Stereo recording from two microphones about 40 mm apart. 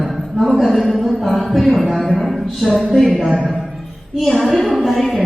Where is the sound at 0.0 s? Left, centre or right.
Centre.